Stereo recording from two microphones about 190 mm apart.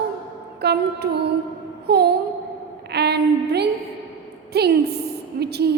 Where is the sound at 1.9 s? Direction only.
60° right (ahead or behind).